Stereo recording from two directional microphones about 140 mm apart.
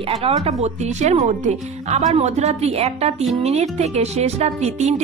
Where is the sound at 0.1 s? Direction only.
50° right (ahead or behind).